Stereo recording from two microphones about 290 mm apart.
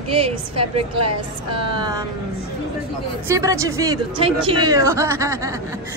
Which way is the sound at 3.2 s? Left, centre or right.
Centre.